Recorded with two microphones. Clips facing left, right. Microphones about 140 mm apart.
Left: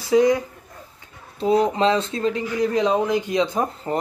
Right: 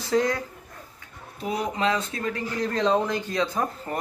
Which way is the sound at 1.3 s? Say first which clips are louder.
Left 9 dB; 30° left (ahead or behind).